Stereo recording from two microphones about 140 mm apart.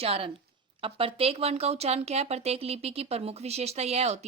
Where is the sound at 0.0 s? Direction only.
45° right (ahead or behind).